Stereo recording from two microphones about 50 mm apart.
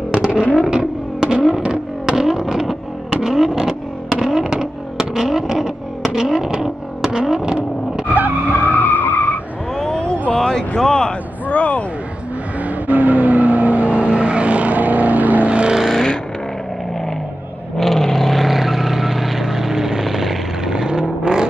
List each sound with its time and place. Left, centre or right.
0.1 s vehicle: centre
8.1 s skidding: right
8.5 s skidding: left
9.8 s a sound: centre
10.8 s speech: centre
12.6 s vehicle: right
15.9 s vehicle: centre
17.7 s vehicle: centre